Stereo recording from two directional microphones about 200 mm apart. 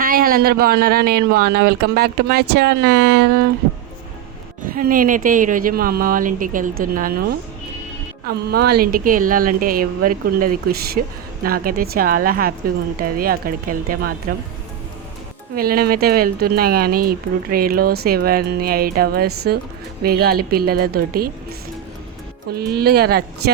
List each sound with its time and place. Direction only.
0.0 s speech: 45° right (ahead or behind)
4.6 s speech: 45° right (ahead or behind)
8.4 s speech: 55° right (ahead or behind)
15.5 s speech: 45° right (ahead or behind)
22.5 s speech: 50° right (ahead or behind)